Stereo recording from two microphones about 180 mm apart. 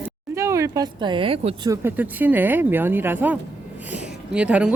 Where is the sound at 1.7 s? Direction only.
10° right (ahead or behind).